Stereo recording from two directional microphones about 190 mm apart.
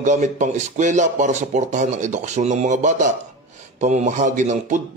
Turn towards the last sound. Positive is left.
turn(degrees=-40)  # may be behind; listen again after turning